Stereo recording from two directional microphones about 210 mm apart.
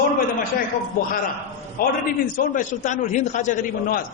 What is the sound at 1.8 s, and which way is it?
A man's voice, 45° left (ahead or behind).